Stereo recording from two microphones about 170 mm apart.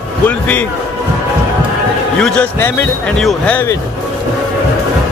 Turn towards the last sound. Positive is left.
turn(degrees=5)  # may be behind; listen again after turning